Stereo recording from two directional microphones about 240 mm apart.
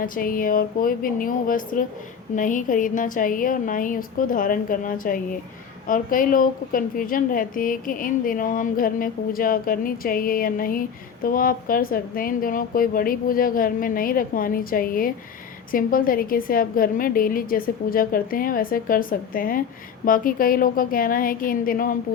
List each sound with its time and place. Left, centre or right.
0.0 s a woman's voice: left